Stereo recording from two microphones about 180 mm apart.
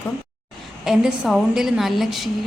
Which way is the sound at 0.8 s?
5° right (ahead or behind).